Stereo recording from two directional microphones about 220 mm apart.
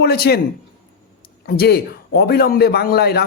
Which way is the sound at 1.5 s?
45° left (ahead or behind).